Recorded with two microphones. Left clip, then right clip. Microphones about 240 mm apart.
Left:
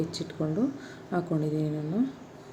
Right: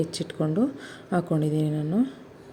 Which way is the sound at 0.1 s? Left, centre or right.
Right.